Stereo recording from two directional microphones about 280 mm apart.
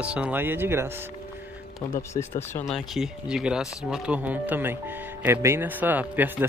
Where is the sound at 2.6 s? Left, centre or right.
Centre.